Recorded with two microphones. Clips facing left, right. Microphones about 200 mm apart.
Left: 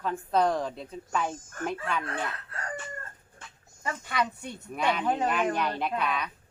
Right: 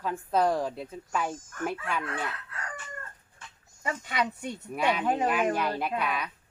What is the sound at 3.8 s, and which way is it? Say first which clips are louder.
Speech: even; 20° right (ahead or behind).